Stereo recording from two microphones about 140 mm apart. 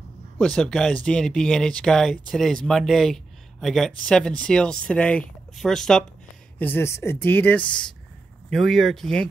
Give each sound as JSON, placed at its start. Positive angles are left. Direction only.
{"t": 0.4, "sound": "speech", "side_deg": 5}
{"t": 6.6, "sound": "speech", "side_deg": 15}